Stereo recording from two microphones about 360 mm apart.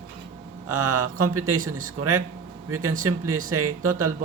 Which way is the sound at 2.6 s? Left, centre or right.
Right.